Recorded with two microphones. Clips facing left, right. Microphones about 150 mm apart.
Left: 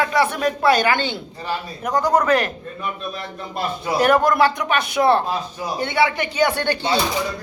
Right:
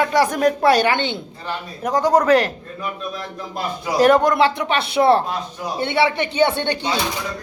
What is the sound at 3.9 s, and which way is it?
Speech, 30° right (ahead or behind).